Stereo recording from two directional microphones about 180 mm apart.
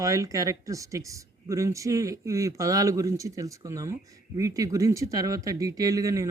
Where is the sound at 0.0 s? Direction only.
20° right (ahead or behind).